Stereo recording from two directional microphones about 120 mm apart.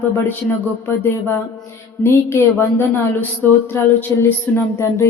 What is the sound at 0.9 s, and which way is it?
Speech, 20° left (ahead or behind).